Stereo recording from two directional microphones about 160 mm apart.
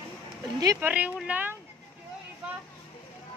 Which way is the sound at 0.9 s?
10° right (ahead or behind).